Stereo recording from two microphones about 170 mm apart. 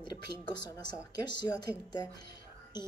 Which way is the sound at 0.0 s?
25° left (ahead or behind).